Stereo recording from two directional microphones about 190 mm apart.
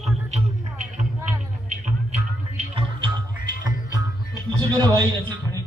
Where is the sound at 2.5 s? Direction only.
30° right (ahead or behind).